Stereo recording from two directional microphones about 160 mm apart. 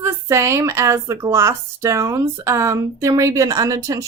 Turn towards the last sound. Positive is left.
turn(degrees=-20)  # may be behind; listen again after turning